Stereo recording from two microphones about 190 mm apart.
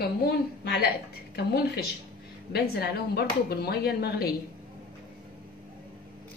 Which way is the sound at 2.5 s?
55° left (ahead or behind).